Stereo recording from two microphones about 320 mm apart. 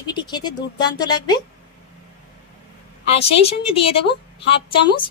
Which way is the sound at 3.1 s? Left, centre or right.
Centre.